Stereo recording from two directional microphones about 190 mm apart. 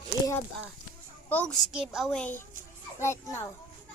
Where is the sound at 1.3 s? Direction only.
5° left (ahead or behind).